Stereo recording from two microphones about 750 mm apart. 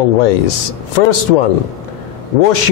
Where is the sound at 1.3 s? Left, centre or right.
Left.